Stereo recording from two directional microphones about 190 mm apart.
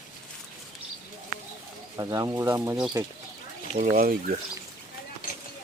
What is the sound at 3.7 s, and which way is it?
Speech, 40° right (ahead or behind).